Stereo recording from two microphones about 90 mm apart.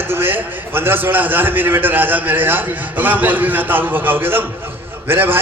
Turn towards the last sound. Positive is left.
turn(degrees=-25)  # may be behind; listen again after turning